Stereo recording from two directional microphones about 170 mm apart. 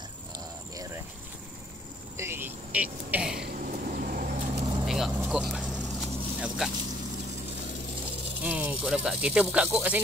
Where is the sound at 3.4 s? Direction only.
55° right (ahead or behind).